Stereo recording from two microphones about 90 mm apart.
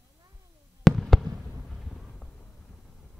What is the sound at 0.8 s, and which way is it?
Fireworks, centre (ahead or behind).